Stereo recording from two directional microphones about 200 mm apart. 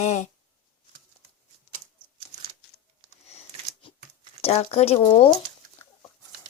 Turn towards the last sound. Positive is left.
turn(degrees=30)  # may be behind; listen again after turning